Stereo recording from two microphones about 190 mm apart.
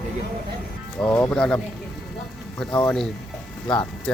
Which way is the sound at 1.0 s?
10° left (ahead or behind).